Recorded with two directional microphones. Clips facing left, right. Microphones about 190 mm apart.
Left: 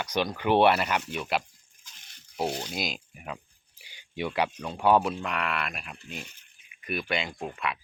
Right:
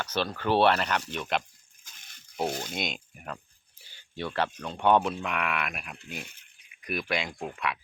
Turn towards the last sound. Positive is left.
turn(degrees=0)  # may be behind; listen again after turning